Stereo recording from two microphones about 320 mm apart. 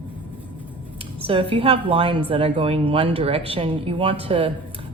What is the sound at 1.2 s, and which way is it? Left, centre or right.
Speech, centre.